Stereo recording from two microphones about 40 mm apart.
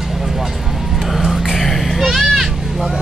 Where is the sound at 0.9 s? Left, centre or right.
Centre.